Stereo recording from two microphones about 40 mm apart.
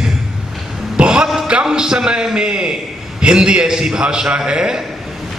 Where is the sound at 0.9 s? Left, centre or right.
Right.